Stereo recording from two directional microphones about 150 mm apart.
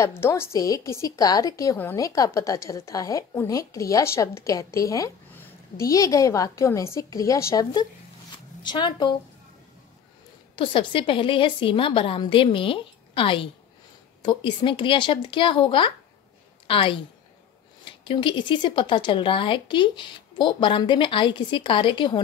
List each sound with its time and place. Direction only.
0.0 s a woman's voice: 20° left (ahead or behind)
10.5 s a woman's voice: 35° left (ahead or behind)